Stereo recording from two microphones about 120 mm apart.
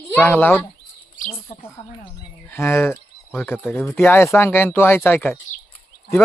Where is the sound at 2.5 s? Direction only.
20° left (ahead or behind).